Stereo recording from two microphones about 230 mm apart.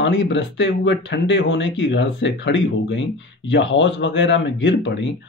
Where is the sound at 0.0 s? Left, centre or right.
Left.